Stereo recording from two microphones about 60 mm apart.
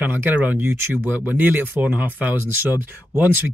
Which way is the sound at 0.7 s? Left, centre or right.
Right.